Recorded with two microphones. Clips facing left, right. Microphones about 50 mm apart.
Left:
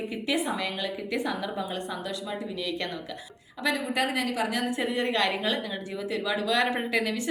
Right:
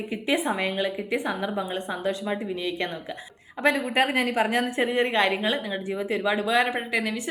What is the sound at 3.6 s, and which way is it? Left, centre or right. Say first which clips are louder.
A woman's voice: right 5 dB; right.